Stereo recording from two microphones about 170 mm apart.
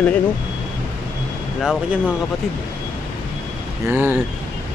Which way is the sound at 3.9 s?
15° right (ahead or behind).